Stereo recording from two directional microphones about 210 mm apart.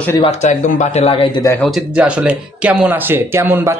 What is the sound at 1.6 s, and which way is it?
Speech, 5° right (ahead or behind).